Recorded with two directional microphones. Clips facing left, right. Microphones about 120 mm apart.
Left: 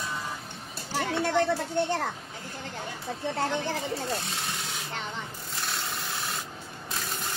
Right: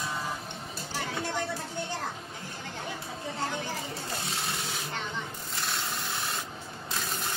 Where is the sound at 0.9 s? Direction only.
65° left (ahead or behind).